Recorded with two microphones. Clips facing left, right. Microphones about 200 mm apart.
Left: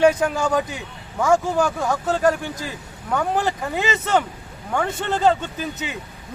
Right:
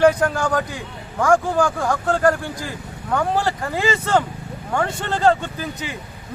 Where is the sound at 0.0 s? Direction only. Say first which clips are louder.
Right 1 dB; 5° left (ahead or behind).